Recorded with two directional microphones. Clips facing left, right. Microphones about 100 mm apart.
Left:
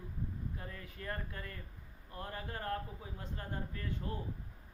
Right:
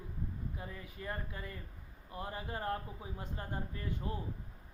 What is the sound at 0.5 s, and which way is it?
A man's voice, 10° right (ahead or behind).